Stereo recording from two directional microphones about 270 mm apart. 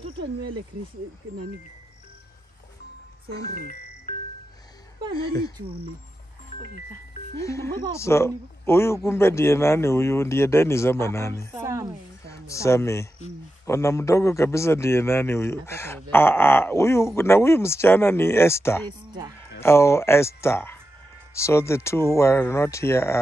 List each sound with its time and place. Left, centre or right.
5.1 s a man's voice: centre
6.7 s speech: left
7.4 s a man's voice: centre
11.5 s speech: centre
12.3 s a man's voice: centre